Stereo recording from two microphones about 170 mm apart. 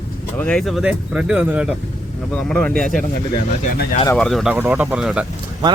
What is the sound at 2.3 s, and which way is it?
Speech, 5° left (ahead or behind).